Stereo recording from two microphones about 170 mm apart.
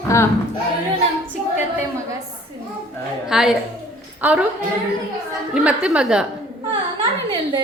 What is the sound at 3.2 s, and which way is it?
A woman's voice, 5° right (ahead or behind).